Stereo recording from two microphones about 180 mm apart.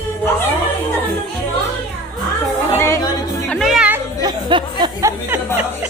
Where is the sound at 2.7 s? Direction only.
15° left (ahead or behind).